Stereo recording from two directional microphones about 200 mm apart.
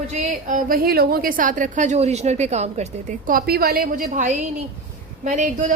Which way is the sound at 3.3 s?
50° right (ahead or behind).